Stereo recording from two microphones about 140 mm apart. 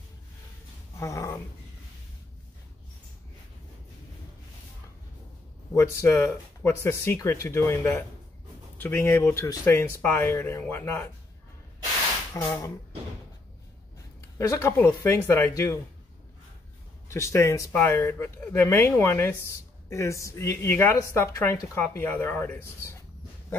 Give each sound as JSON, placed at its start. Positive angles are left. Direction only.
{"t": 0.9, "sound": "a sound", "side_deg": 20}
{"t": 5.8, "sound": "a woman's voice", "side_deg": 15}
{"t": 12.4, "sound": "speech", "side_deg": 20}
{"t": 14.5, "sound": "a woman's voice", "side_deg": 15}
{"t": 17.1, "sound": "a woman's voice", "side_deg": 20}